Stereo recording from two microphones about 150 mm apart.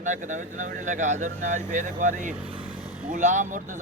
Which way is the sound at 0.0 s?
55° right (ahead or behind).